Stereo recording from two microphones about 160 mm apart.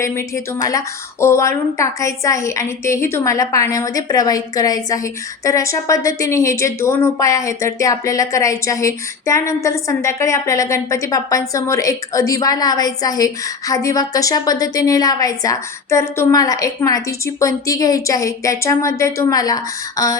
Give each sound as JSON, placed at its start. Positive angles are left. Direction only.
{"t": 0.0, "sound": "speech", "side_deg": 20}